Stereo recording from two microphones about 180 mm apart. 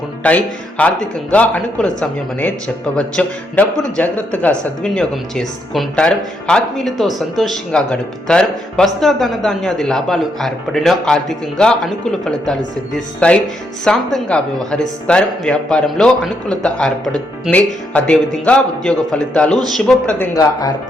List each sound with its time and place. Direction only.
0.2 s a man's voice: 5° left (ahead or behind)
20.3 s speech: 20° left (ahead or behind)